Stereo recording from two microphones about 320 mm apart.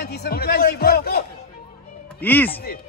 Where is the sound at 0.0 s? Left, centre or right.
Left.